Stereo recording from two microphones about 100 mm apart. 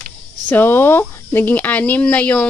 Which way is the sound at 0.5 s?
20° left (ahead or behind).